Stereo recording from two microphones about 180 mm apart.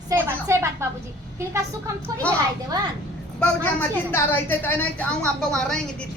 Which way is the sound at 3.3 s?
10° left (ahead or behind).